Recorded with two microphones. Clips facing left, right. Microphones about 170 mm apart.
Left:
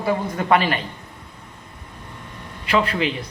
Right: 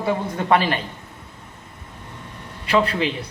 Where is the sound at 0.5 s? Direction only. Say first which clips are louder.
Even; 35° right (ahead or behind).